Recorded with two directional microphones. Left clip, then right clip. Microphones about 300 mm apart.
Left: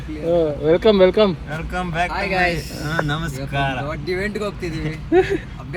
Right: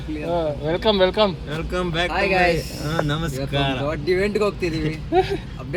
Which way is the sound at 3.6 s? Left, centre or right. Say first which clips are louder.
Left 1 dB; centre.